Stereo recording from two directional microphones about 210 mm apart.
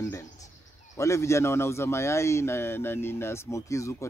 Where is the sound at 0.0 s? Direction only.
15° left (ahead or behind).